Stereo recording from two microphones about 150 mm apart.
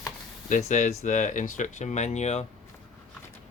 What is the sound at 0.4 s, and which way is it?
Speech, 55° left (ahead or behind).